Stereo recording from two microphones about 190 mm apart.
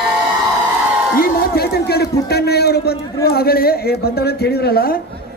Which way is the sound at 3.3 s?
55° left (ahead or behind).